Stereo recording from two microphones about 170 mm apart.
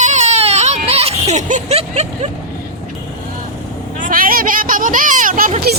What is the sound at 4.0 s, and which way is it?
Speech, 55° right (ahead or behind).